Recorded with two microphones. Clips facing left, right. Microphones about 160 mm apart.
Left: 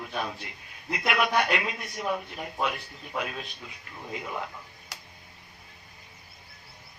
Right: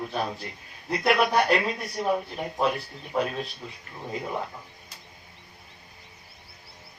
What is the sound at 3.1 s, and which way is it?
Speech, 35° right (ahead or behind).